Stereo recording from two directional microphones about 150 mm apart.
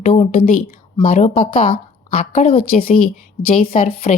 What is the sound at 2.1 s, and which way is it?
Speech, 60° left (ahead or behind).